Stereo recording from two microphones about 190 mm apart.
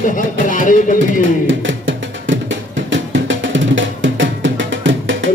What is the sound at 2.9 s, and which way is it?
Music, 75° right (ahead or behind).